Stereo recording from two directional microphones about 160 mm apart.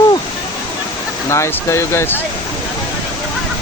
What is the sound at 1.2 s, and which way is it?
Speech, 15° left (ahead or behind).